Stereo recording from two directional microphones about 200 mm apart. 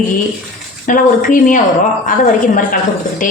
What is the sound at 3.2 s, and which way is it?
Speech, 40° left (ahead or behind).